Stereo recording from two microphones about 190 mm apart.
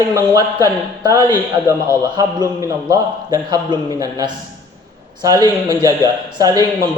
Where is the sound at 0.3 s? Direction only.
20° right (ahead or behind).